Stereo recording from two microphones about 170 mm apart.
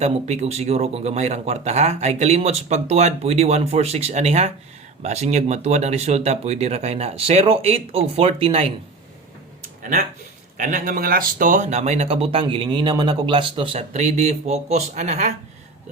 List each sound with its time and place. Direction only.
0.0 s speech: 40° right (ahead or behind)
10.6 s speech: 50° right (ahead or behind)